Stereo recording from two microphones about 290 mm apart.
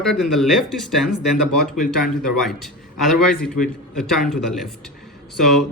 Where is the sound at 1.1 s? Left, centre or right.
Left.